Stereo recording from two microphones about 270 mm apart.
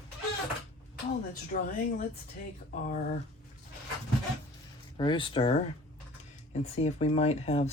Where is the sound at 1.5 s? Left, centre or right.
Left.